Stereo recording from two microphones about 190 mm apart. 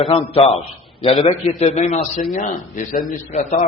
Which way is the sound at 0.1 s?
30° left (ahead or behind).